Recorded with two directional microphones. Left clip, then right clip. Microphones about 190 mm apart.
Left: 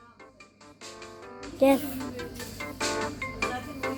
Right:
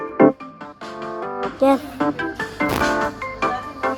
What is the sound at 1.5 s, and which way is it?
Speech, centre (ahead or behind).